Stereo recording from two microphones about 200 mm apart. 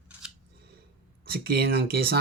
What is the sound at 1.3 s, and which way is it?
Speech, 50° right (ahead or behind).